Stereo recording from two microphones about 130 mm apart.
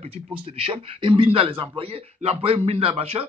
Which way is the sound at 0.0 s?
50° right (ahead or behind).